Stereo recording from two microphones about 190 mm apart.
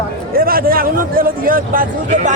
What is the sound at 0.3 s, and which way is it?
A man's voice, 50° right (ahead or behind).